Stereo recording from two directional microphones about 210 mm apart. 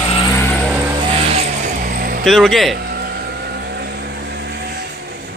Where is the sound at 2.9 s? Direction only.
50° right (ahead or behind).